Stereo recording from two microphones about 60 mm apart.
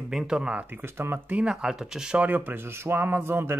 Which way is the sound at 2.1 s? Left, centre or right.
Right.